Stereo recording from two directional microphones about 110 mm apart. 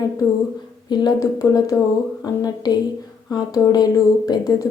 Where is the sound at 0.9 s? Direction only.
40° left (ahead or behind).